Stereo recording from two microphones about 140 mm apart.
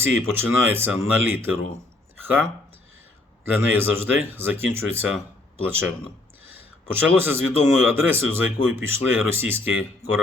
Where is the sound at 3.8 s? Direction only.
15° right (ahead or behind).